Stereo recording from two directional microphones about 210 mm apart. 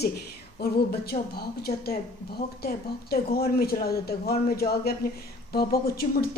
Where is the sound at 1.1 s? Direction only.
50° left (ahead or behind).